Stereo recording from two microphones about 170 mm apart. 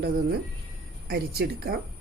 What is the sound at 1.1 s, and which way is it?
Speech, 65° right (ahead or behind).